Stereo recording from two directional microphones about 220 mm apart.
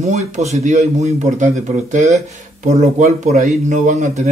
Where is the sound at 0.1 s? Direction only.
30° right (ahead or behind).